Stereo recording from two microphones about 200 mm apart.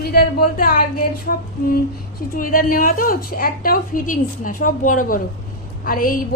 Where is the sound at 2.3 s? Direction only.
45° left (ahead or behind).